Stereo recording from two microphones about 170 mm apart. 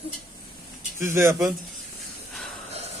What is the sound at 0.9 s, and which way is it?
Speech, 15° right (ahead or behind).